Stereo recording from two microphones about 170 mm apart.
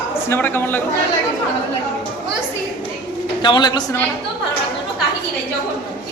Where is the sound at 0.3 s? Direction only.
15° left (ahead or behind).